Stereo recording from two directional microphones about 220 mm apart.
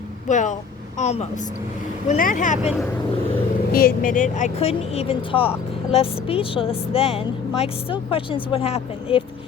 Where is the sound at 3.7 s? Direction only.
40° left (ahead or behind); by 9.2 s 25° left (ahead or behind).